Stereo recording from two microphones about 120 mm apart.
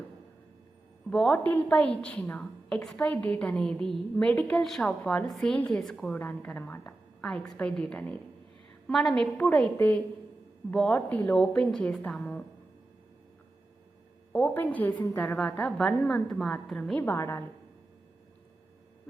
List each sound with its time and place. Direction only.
1.1 s a woman's voice: centre (ahead or behind)
1.5 s a woman's voice: 15° left (ahead or behind)
9.4 s a woman's voice: 15° left (ahead or behind)
14.3 s a woman's voice: 15° left (ahead or behind)
17.0 s a woman's voice: 20° left (ahead or behind)